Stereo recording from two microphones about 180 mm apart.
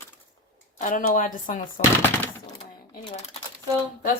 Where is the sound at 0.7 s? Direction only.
45° left (ahead or behind).